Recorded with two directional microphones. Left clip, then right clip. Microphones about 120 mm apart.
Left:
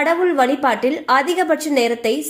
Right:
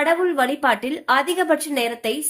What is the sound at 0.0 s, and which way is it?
A woman's voice, 25° left (ahead or behind).